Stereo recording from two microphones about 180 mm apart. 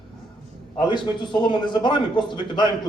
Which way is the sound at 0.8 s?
25° left (ahead or behind).